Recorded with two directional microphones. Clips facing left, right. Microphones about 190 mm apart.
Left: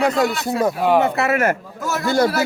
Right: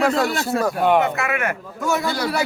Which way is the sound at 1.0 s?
35° left (ahead or behind).